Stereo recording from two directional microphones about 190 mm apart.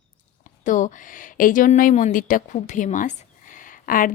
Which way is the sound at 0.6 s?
40° left (ahead or behind).